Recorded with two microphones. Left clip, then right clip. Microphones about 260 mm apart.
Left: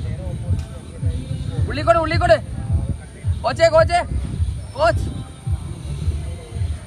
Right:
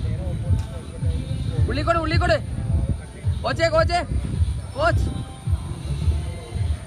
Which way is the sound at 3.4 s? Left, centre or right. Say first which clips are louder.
Left 6 dB; left.